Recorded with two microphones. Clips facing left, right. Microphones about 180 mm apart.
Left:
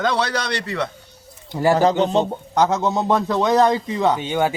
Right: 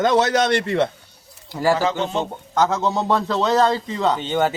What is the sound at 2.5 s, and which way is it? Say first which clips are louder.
A man's voice: right 1 dB; 15° left (ahead or behind).